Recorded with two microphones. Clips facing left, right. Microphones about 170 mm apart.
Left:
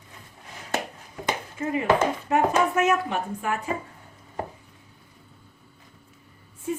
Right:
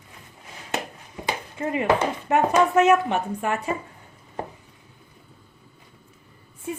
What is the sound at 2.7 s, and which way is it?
Speech, 70° right (ahead or behind).